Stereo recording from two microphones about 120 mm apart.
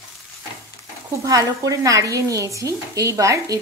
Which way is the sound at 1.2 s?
30° right (ahead or behind).